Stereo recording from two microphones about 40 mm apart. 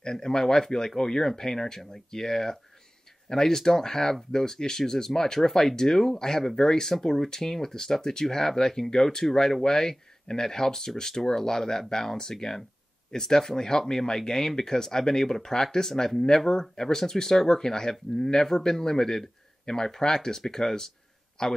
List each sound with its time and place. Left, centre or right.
0.0 s a man's voice: centre